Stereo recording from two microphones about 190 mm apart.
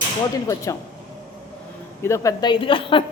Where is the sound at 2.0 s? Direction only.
15° left (ahead or behind).